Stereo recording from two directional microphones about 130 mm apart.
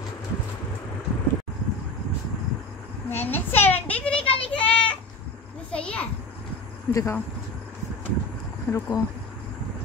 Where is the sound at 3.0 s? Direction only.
15° left (ahead or behind).